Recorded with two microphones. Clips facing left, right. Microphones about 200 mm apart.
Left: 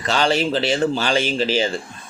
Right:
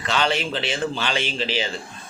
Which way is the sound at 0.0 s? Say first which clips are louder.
Left 4 dB; 40° left (ahead or behind).